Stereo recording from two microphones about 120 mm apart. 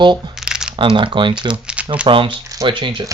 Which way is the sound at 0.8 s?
45° right (ahead or behind).